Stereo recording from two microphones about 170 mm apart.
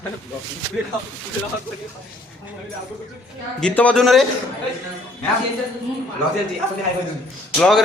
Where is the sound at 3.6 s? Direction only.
5° left (ahead or behind).